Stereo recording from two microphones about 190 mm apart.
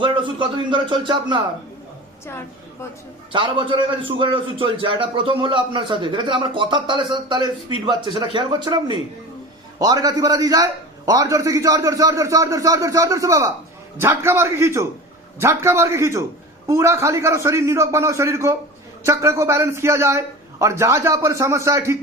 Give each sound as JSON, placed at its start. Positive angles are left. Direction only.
{"t": 0.0, "sound": "speech", "side_deg": -25}
{"t": 3.3, "sound": "a man's voice", "side_deg": -25}